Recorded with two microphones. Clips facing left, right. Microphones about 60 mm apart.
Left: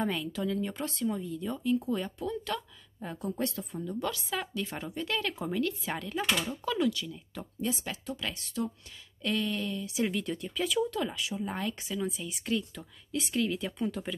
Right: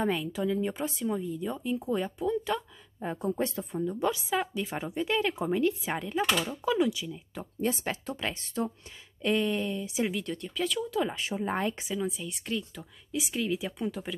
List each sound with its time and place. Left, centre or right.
0.0 s speech: centre
7.6 s speech: right
10.0 s speech: centre
11.1 s speech: right
11.9 s speech: centre